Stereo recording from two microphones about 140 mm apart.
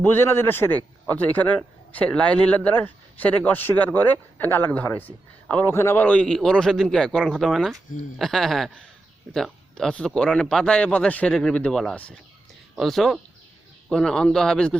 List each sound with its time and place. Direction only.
0.0 s a man's voice: 15° left (ahead or behind)